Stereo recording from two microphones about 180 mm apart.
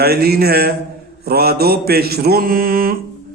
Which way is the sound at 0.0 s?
60° right (ahead or behind).